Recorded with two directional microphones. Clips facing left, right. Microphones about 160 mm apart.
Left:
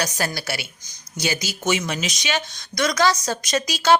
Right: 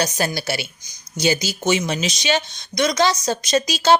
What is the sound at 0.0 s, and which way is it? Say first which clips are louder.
A woman's voice: right 4 dB; 25° right (ahead or behind).